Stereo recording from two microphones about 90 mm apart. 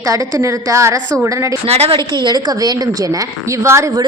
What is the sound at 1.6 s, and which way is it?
Speech, 90° right.